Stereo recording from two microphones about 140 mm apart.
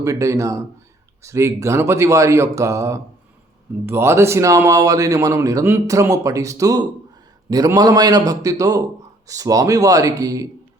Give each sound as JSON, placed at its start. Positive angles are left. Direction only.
{"t": 0.0, "sound": "a man's voice", "side_deg": -20}